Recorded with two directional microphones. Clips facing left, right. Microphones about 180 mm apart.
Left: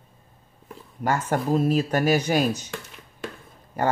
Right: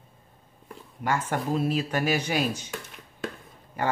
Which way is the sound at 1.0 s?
40° left (ahead or behind).